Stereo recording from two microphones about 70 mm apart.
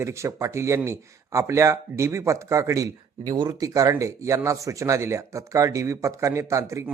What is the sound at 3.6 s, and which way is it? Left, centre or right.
Speech, right.